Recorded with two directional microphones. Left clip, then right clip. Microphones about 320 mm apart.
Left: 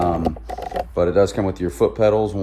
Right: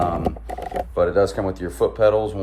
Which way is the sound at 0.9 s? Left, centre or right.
Left.